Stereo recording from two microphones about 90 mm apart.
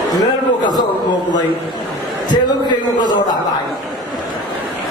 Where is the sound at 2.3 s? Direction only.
55° left (ahead or behind).